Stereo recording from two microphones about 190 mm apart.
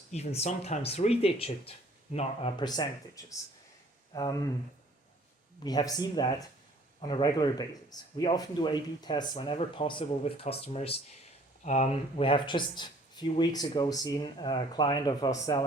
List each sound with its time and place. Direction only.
0.1 s speech: 35° left (ahead or behind)
5.6 s speech: 20° left (ahead or behind)